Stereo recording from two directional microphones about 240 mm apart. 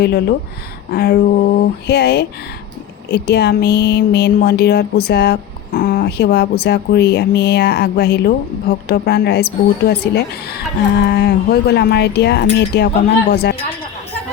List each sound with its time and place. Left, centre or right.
0.0 s speech: left